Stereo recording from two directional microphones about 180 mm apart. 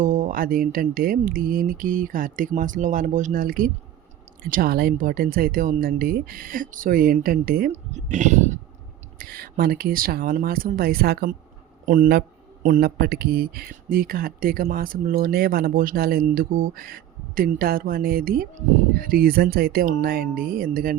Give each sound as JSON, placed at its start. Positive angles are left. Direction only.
{"t": 0.0, "sound": "speech", "side_deg": -45}
{"t": 7.7, "sound": "speech", "side_deg": -40}
{"t": 9.1, "sound": "speech", "side_deg": -55}